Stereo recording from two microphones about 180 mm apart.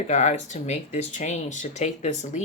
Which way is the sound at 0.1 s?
40° left (ahead or behind).